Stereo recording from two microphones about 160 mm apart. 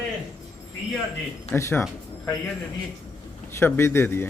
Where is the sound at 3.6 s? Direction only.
15° left (ahead or behind).